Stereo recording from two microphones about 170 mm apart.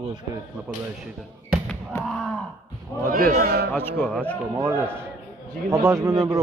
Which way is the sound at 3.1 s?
60° right (ahead or behind).